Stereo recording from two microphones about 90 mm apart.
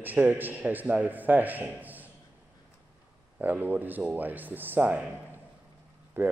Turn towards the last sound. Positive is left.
turn(degrees=-25)  # may be behind; listen again after turning